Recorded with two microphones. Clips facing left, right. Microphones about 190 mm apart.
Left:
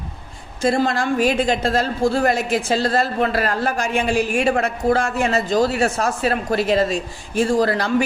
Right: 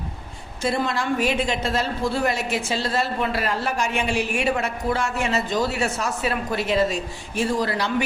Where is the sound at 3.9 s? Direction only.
35° left (ahead or behind).